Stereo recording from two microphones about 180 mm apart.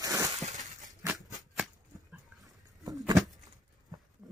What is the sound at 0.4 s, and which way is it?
Glass, 40° right (ahead or behind).